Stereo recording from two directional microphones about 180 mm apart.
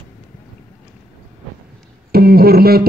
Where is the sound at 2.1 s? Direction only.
60° right (ahead or behind).